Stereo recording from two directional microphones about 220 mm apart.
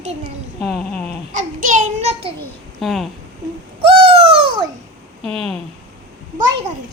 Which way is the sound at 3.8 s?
25° right (ahead or behind).